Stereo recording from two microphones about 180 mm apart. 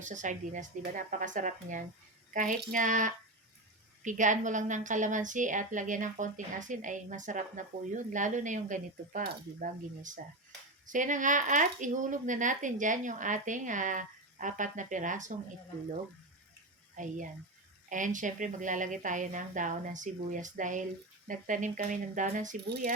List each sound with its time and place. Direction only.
0.0 s a woman's voice: 45° right (ahead or behind)
17.0 s a woman's voice: 45° right (ahead or behind)